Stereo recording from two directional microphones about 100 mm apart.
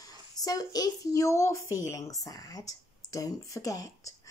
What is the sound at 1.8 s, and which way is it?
Speech, 30° left (ahead or behind).